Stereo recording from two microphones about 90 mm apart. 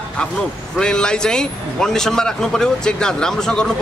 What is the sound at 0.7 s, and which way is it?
Speech, 10° left (ahead or behind).